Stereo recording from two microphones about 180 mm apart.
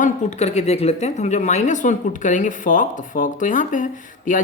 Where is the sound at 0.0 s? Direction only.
40° left (ahead or behind).